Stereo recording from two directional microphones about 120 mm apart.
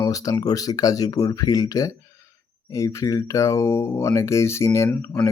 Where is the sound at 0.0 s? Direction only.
30° left (ahead or behind).